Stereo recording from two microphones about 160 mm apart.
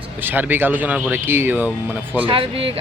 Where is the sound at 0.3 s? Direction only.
10° right (ahead or behind).